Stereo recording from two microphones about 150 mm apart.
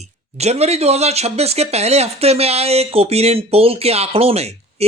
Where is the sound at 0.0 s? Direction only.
45° right (ahead or behind).